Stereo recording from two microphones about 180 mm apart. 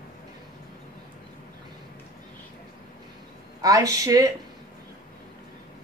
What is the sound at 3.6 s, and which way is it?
Speech, 20° right (ahead or behind).